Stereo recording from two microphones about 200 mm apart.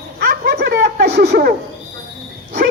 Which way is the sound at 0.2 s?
50° right (ahead or behind).